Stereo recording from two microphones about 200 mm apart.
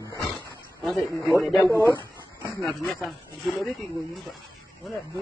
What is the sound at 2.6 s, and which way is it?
Speech, centre (ahead or behind).